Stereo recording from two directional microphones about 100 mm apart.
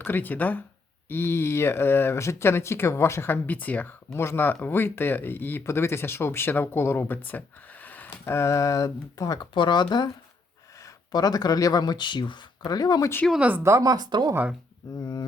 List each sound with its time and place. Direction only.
0.0 s speech: 20° left (ahead or behind); by 9.5 s 40° left (ahead or behind)
9.6 s speech: 50° left (ahead or behind)
13.6 s speech: 30° right (ahead or behind); by 14.3 s 45° right (ahead or behind)
14.9 s speech: 45° left (ahead or behind)